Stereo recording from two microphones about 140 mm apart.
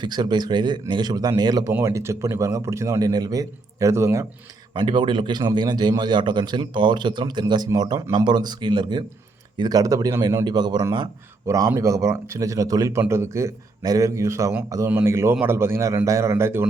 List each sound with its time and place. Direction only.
0.0 s a man's voice: 30° right (ahead or behind)
4.7 s a man's voice: 35° right (ahead or behind); by 16.6 s 15° right (ahead or behind)